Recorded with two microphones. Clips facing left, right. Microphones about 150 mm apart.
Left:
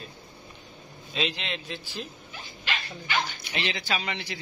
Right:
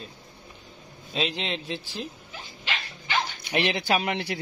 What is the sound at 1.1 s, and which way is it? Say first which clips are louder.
Speech: right 2 dB; 35° right (ahead or behind).